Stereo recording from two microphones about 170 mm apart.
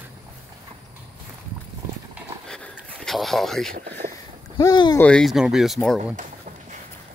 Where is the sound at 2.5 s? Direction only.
5° left (ahead or behind).